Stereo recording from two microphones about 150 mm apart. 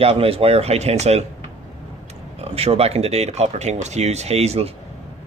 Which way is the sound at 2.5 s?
40° right (ahead or behind).